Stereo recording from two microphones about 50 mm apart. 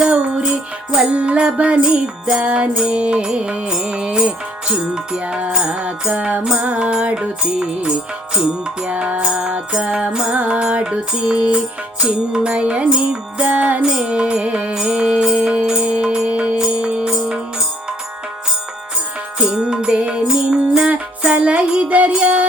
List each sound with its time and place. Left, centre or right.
0.0 s music: centre
8.9 s music: right
9.2 s music: centre
13.8 s music: centre
14.8 s music: centre
15.4 s music: right
16.2 s music: right
16.6 s music: centre
19.4 s music: centre